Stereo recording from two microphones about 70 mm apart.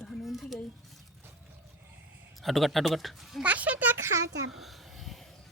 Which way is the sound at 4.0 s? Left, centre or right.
Right.